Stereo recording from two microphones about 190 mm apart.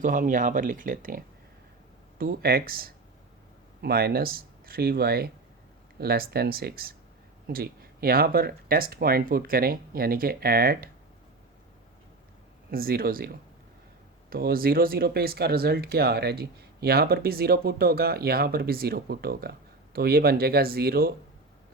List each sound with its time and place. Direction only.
0.0 s speech: 45° right (ahead or behind)
12.7 s speech: 50° right (ahead or behind)